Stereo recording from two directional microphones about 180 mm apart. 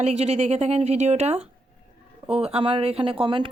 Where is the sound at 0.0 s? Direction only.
40° right (ahead or behind).